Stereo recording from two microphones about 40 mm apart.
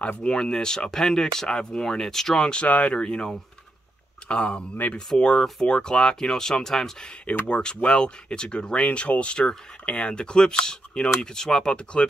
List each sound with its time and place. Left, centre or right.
0.2 s speech: centre
2.6 s speech: left
4.3 s speech: left
7.4 s speech: left